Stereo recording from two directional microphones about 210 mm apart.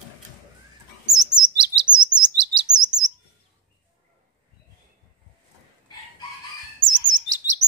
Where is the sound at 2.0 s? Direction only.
20° right (ahead or behind).